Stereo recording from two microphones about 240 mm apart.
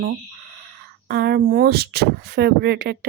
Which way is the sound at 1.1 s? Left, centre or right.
Right.